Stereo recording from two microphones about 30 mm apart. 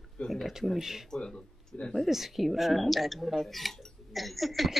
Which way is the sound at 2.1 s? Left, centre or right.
Centre.